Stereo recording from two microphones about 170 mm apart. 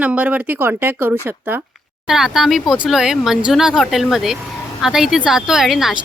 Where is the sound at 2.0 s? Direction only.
Centre (ahead or behind).